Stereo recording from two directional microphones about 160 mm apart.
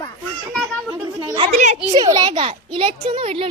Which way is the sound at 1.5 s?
45° right (ahead or behind).